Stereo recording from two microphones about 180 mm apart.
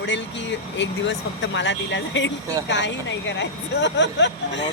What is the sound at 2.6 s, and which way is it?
Speech, 75° left (ahead or behind).